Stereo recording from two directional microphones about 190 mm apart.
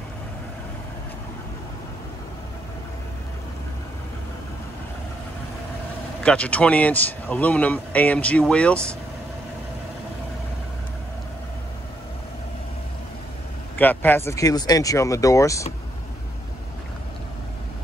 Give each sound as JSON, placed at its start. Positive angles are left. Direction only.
{"t": 6.2, "sound": "speech", "side_deg": 5}
{"t": 13.7, "sound": "speech", "side_deg": 10}